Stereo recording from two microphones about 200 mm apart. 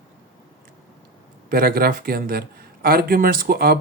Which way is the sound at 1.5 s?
50° right (ahead or behind).